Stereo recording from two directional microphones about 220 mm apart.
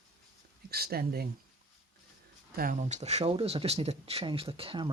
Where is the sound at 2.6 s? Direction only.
35° right (ahead or behind).